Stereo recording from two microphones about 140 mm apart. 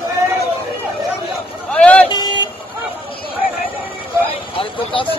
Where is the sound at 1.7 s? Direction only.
10° left (ahead or behind).